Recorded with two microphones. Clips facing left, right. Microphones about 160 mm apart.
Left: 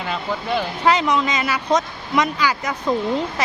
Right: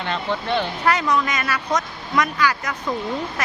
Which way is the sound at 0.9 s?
20° left (ahead or behind).